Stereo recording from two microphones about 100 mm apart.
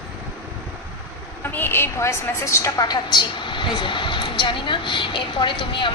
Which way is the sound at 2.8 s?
45° left (ahead or behind).